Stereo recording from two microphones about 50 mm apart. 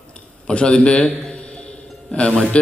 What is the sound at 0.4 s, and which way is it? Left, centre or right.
A man's voice, centre.